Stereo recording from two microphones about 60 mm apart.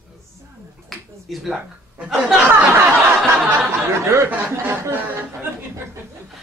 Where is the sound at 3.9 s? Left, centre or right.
Right.